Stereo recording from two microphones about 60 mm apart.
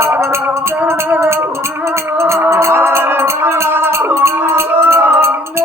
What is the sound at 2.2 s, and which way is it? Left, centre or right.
Music, right.